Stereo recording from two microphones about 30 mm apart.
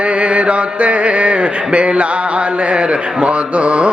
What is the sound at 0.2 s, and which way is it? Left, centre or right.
Mantra, right.